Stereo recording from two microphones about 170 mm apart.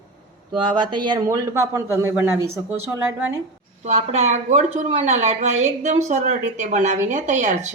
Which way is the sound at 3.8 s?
40° right (ahead or behind).